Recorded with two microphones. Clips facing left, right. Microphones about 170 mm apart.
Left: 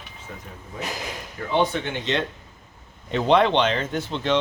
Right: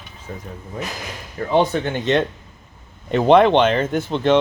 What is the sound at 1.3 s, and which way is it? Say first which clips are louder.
Speech: right 5 dB; 40° right (ahead or behind).